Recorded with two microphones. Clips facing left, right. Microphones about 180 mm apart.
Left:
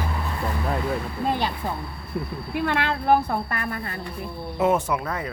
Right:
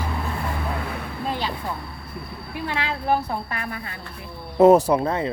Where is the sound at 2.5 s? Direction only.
60° left (ahead or behind).